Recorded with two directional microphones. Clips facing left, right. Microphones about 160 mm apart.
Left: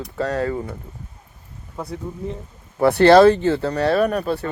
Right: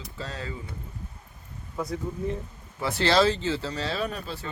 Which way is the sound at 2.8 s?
60° left (ahead or behind).